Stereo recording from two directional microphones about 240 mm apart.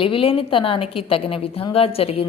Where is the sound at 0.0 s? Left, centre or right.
Left.